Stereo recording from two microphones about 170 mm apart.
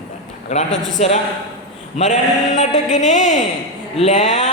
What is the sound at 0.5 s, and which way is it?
A man's voice, 45° left (ahead or behind).